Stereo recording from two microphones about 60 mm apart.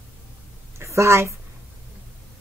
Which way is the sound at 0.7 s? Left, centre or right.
Right.